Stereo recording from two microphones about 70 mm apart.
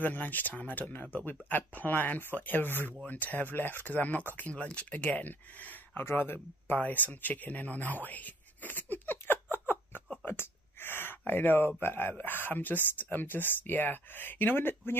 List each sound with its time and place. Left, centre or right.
0.0 s speech: left
6.8 s a sound: left
10.2 s speech: left